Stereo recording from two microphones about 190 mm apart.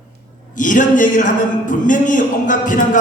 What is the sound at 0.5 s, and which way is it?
Speech, 45° left (ahead or behind).